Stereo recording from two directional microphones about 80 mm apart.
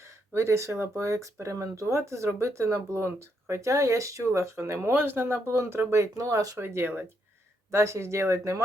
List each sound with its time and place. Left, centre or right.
0.0 s speech: right
6.6 s speech: right